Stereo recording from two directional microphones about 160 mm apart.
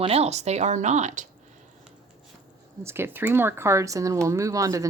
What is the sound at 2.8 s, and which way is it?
Speech, 15° right (ahead or behind).